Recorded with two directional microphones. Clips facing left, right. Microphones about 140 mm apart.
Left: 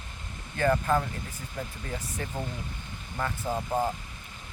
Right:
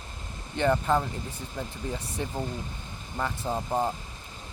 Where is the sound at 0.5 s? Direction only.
25° right (ahead or behind).